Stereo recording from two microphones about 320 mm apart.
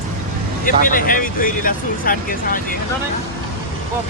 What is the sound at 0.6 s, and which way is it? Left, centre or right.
Speech, left.